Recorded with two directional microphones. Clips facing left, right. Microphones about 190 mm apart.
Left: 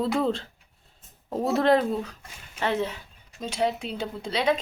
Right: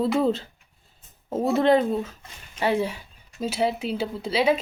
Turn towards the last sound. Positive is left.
turn(degrees=-5)  # may be behind; listen again after turning